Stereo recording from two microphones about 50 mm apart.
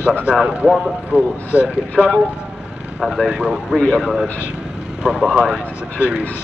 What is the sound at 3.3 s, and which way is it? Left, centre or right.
Speech, centre.